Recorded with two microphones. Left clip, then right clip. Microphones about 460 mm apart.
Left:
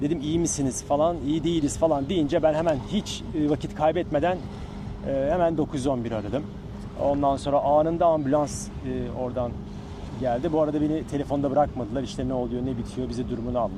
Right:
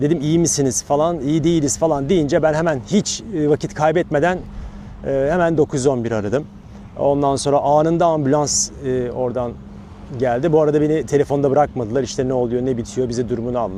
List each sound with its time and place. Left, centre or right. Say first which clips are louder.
0.3 s speech: right 9 dB; right
10.2 s speech: right 8 dB; right